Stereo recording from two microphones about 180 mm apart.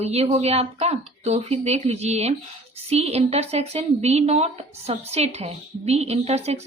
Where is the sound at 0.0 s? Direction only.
35° right (ahead or behind).